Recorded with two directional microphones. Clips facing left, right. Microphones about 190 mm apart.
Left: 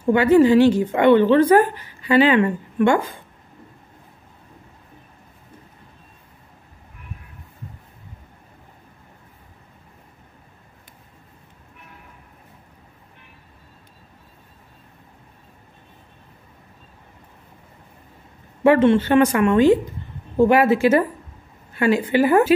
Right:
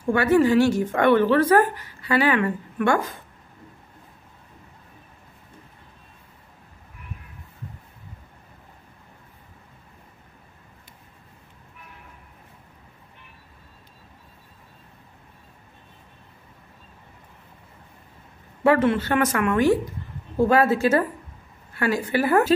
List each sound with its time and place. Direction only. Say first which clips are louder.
0.1 s a woman's voice: left 4 dB; 20° left (ahead or behind)
18.6 s a woman's voice: left 5 dB; 25° left (ahead or behind)
21.7 s a woman's voice: left 5 dB; 20° left (ahead or behind)